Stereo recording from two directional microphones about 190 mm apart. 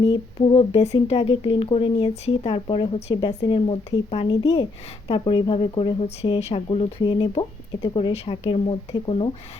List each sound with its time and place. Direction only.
0.0 s speech: 25° left (ahead or behind)